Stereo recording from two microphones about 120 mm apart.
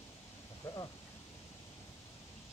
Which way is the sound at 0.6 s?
20° left (ahead or behind).